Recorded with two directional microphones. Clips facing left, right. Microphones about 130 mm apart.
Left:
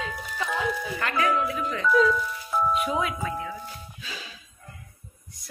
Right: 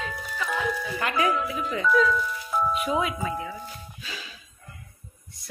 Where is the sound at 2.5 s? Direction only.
Centre (ahead or behind).